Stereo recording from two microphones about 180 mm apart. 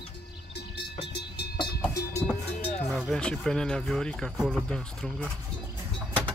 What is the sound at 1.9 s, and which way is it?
Speech, 10° left (ahead or behind).